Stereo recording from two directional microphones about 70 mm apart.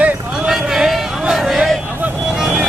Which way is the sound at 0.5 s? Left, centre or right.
Centre.